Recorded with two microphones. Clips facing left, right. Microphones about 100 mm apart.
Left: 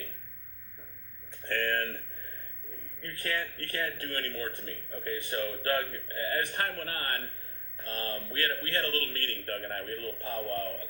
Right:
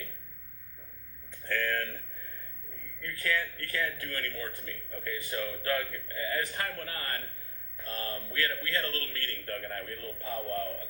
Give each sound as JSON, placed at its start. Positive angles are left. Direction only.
{"t": 1.5, "sound": "a man's voice", "side_deg": 55}
{"t": 5.1, "sound": "a man's voice", "side_deg": 55}
{"t": 10.2, "sound": "speech", "side_deg": 55}